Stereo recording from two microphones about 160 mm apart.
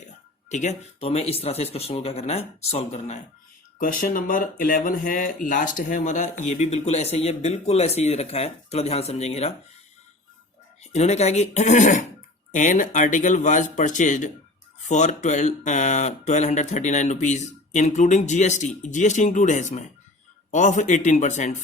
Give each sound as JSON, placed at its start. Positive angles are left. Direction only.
{"t": 0.5, "sound": "speech", "side_deg": 45}
{"t": 3.8, "sound": "speech", "side_deg": 60}
{"t": 10.9, "sound": "speech", "side_deg": 45}